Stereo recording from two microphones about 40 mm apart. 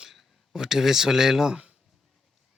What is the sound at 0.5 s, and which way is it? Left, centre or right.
Speech, centre.